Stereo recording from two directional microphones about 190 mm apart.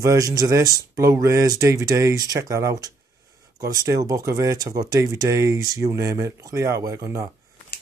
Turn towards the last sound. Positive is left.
turn(degrees=-15)  # may be behind; listen again after turning